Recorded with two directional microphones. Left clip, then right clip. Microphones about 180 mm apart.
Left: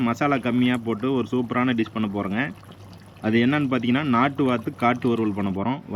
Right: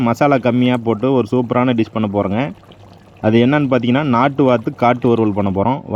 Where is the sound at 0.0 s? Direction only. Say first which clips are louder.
Right 9 dB; 45° right (ahead or behind).